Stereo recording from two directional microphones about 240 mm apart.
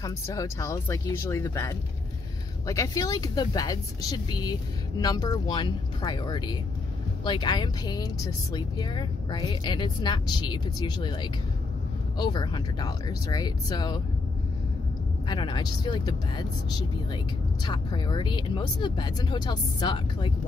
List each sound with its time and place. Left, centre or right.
0.0 s a woman's voice: centre
15.2 s speech: centre